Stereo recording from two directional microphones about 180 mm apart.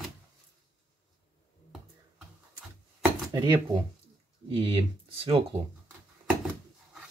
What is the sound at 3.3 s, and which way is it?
Speech, 25° right (ahead or behind).